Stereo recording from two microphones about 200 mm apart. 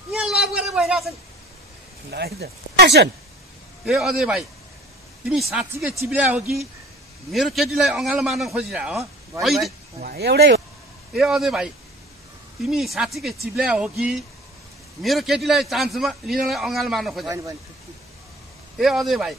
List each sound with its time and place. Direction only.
0.1 s a man's voice: centre (ahead or behind)
2.0 s speech: 50° right (ahead or behind)
3.8 s a man's voice: centre (ahead or behind)
9.9 s speech: 50° right (ahead or behind)
11.1 s a man's voice: centre (ahead or behind)
18.8 s a man's voice: centre (ahead or behind)